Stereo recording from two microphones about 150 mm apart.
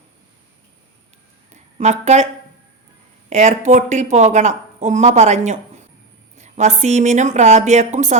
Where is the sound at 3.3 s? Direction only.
50° right (ahead or behind).